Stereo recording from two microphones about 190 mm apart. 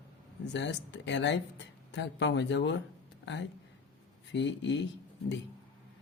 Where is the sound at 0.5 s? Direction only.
70° left (ahead or behind).